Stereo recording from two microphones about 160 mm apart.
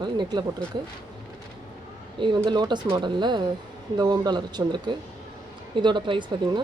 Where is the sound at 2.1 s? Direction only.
30° right (ahead or behind).